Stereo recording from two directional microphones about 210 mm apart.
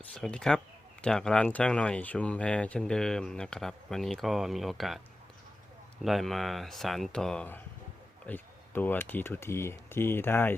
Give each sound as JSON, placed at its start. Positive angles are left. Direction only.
{"t": 0.0, "sound": "speech", "side_deg": 5}
{"t": 6.0, "sound": "speech", "side_deg": 0}